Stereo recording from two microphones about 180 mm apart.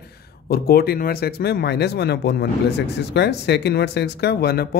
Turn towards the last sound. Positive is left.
turn(degrees=60)  # may be behind; listen again after turning